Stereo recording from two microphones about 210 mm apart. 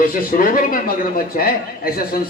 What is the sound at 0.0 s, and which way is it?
Speech, 40° left (ahead or behind).